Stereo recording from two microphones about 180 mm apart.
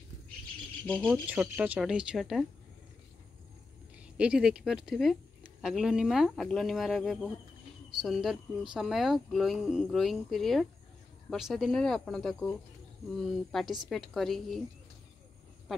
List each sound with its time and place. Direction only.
0.8 s speech: 5° left (ahead or behind)
1.2 s speech: 10° right (ahead or behind)
4.2 s speech: 5° right (ahead or behind)